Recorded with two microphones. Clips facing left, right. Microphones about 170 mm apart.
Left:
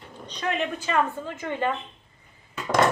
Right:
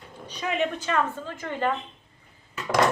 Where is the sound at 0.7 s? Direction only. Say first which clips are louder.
Left 1 dB; 10° left (ahead or behind).